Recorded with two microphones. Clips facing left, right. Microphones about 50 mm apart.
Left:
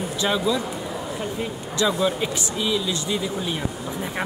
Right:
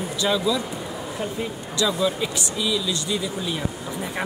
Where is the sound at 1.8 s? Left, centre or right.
Left.